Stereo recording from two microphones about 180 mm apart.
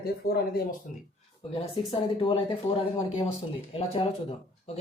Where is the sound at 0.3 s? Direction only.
55° left (ahead or behind).